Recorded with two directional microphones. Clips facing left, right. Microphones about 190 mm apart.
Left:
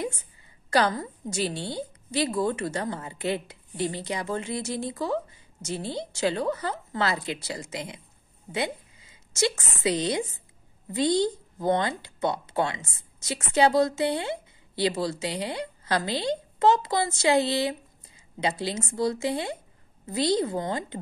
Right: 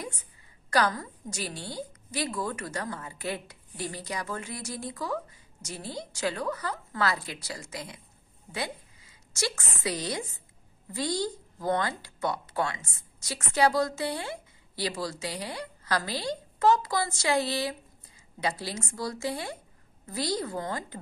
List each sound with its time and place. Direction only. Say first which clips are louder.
0.7 s a woman's voice: left 3 dB; 25° left (ahead or behind)